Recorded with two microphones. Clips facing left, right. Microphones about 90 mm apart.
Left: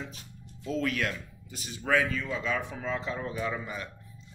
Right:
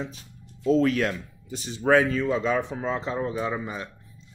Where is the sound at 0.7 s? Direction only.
30° right (ahead or behind).